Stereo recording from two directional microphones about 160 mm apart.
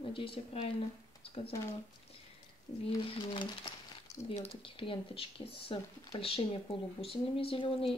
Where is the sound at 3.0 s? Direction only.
35° left (ahead or behind).